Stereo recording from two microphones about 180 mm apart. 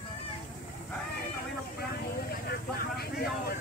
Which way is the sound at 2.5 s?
60° left (ahead or behind).